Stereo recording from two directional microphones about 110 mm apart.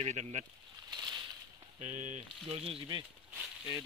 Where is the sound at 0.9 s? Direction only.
40° right (ahead or behind).